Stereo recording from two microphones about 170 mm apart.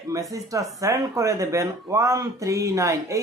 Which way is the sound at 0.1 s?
20° right (ahead or behind).